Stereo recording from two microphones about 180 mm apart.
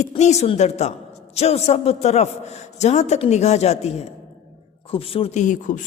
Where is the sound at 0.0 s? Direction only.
40° left (ahead or behind).